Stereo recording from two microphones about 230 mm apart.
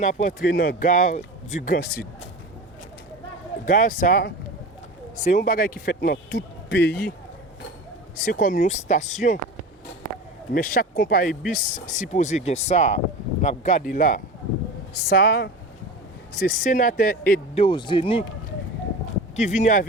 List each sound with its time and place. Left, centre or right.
0.0 s a man's voice: left
3.7 s a man's voice: left
8.2 s a man's voice: left
10.5 s a man's voice: left
17.6 s speech: left
19.4 s a man's voice: left